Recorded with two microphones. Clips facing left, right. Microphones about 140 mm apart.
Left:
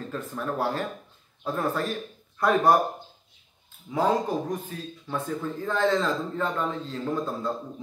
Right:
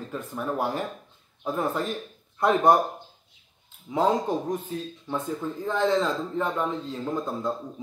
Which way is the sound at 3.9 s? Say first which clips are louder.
Right 1 dB; 20° right (ahead or behind).